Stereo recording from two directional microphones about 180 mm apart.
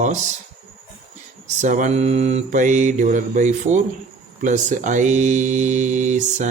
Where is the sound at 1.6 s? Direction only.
45° right (ahead or behind).